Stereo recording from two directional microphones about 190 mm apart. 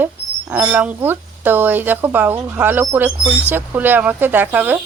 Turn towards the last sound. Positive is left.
turn(degrees=-10)  # may be behind; listen again after turning